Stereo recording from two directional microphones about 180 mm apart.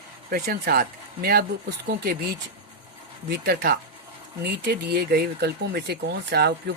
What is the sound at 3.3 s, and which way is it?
Speech, 60° right (ahead or behind).